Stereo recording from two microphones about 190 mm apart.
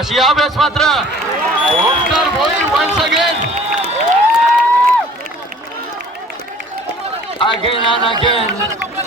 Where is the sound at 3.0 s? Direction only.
Centre (ahead or behind).